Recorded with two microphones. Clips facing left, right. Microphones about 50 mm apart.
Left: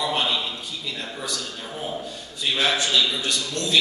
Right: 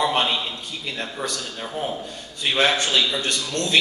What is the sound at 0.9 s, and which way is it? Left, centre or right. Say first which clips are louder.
Speech: right 5 dB; right.